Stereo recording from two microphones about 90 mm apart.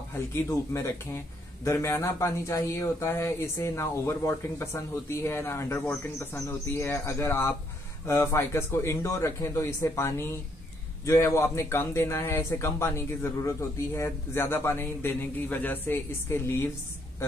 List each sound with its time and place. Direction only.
0.1 s a man's voice: 30° left (ahead or behind)